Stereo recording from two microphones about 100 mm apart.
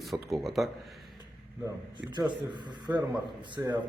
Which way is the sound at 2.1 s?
45° right (ahead or behind).